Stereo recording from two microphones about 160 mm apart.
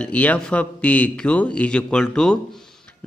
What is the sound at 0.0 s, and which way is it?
A man's voice, 10° left (ahead or behind).